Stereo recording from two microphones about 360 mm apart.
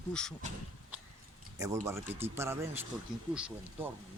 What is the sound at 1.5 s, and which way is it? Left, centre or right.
Speech, centre.